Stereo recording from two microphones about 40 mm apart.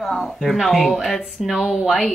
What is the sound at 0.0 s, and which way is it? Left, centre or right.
Speech, centre.